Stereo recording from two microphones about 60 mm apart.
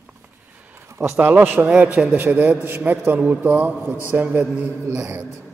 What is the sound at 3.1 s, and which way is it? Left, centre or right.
Speech, right.